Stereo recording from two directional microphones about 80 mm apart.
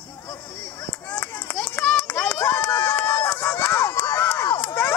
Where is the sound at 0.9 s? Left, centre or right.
Centre.